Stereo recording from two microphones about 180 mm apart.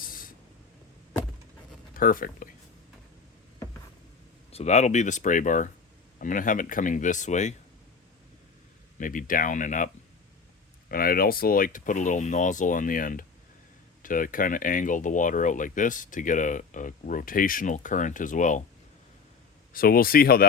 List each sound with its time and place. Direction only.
0.0 s train: 50° left (ahead or behind)
1.9 s speech: 50° left (ahead or behind)
4.5 s speech: 40° left (ahead or behind)
9.0 s speech: 50° left (ahead or behind)
19.7 s speech: 55° left (ahead or behind)